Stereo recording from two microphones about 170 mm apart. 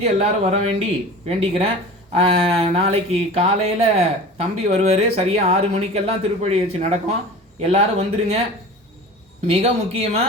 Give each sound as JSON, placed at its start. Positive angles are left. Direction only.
{"t": 0.0, "sound": "speech", "side_deg": -40}
{"t": 9.5, "sound": "speech", "side_deg": -40}